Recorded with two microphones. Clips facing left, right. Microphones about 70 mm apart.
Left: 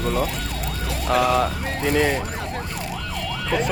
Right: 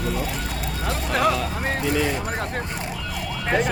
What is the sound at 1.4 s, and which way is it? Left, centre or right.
Speech, left.